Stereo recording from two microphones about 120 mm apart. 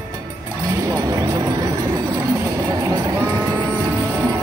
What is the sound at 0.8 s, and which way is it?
Speech, 30° right (ahead or behind).